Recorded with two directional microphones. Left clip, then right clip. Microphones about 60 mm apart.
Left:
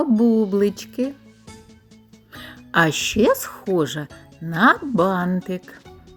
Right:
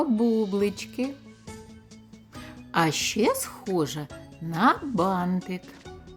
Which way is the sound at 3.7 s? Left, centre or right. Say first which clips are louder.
Left 5 dB; left.